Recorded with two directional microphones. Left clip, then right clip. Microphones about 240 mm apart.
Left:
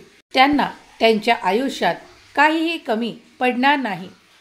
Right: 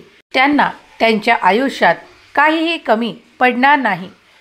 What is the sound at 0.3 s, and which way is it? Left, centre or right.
A woman's voice, centre.